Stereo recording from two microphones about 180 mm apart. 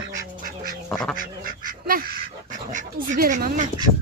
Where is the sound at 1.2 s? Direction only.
50° right (ahead or behind).